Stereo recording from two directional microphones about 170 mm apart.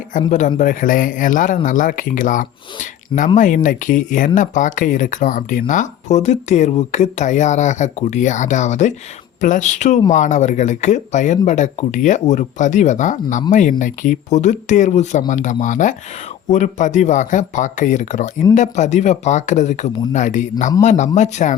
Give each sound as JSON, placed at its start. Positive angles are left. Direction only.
{"t": 0.3, "sound": "speech", "side_deg": 45}